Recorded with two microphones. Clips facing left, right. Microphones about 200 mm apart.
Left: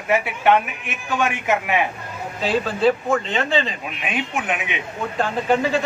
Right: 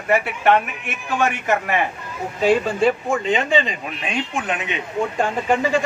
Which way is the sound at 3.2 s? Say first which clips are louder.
Right 3 dB; centre (ahead or behind).